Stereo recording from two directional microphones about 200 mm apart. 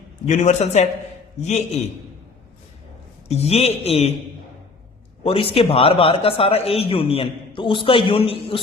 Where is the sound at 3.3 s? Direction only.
30° left (ahead or behind).